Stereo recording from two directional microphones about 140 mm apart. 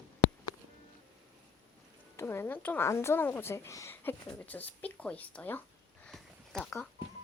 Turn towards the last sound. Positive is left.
turn(degrees=5)  # may be behind; listen again after turning